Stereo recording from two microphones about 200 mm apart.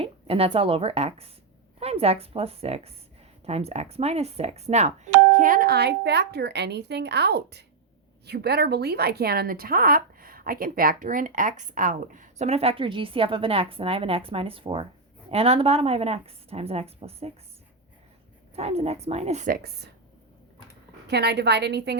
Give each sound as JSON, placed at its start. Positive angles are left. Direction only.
{"t": 0.0, "sound": "a woman's voice", "side_deg": -30}
{"t": 18.5, "sound": "speech", "side_deg": -30}
{"t": 21.1, "sound": "a woman's voice", "side_deg": -55}